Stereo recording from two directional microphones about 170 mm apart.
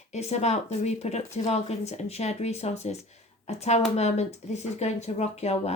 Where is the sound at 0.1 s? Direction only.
40° left (ahead or behind).